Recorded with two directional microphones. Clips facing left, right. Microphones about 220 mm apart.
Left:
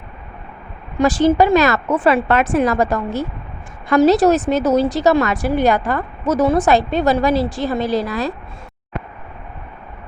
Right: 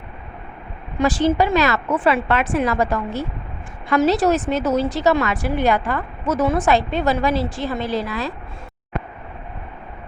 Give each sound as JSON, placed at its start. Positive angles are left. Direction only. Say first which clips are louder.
{"t": 0.9, "sound": "a woman's voice", "louder": "left 4 dB", "side_deg": 40}